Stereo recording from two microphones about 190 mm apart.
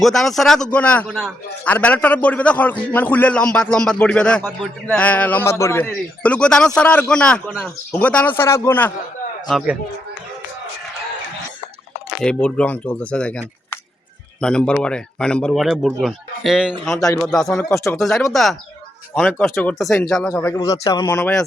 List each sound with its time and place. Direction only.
0.0 s a man's voice: centre (ahead or behind)
9.5 s speech: centre (ahead or behind)
12.0 s speech: 5° left (ahead or behind)
14.4 s speech: 5° left (ahead or behind)
16.9 s a man's voice: 15° left (ahead or behind)
17.2 s speech: centre (ahead or behind)
17.5 s a man's voice: 15° left (ahead or behind)
17.9 s speech: centre (ahead or behind)
20.3 s a man's voice: 15° left (ahead or behind)